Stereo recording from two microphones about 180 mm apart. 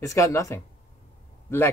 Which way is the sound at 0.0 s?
15° left (ahead or behind).